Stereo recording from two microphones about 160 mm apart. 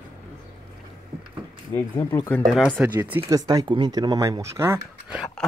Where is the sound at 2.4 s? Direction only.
5° left (ahead or behind).